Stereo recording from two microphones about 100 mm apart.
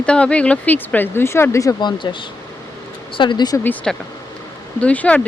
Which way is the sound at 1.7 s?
50° left (ahead or behind).